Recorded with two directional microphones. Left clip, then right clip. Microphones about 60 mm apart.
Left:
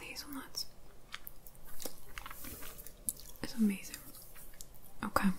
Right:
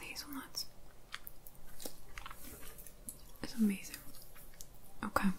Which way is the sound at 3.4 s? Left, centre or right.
Centre.